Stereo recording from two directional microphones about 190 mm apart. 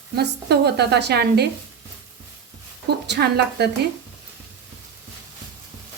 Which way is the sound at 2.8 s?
60° right (ahead or behind).